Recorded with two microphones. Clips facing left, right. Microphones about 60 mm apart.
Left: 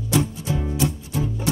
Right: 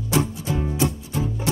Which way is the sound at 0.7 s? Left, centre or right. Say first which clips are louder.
Even; right.